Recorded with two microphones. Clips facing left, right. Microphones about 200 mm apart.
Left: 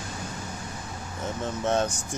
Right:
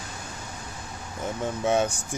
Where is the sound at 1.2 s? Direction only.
10° right (ahead or behind).